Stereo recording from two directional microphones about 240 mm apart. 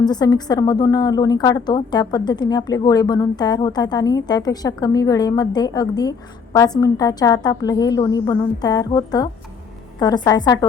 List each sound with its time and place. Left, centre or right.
0.0 s a woman's voice: centre